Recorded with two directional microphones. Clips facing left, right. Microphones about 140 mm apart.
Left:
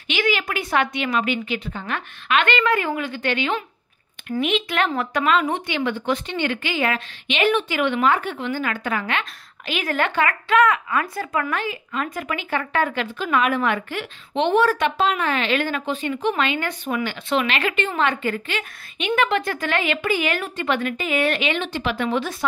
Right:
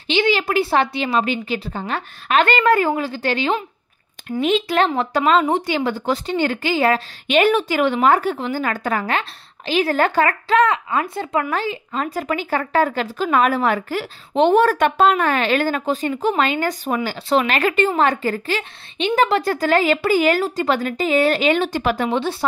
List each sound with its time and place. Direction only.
0.1 s a woman's voice: 30° right (ahead or behind)